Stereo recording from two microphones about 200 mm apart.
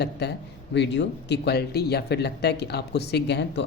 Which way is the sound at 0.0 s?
55° left (ahead or behind).